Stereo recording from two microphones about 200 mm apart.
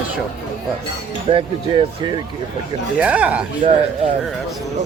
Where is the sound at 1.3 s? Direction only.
25° right (ahead or behind).